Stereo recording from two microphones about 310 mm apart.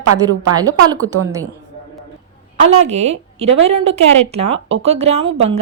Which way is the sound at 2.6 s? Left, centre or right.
Right.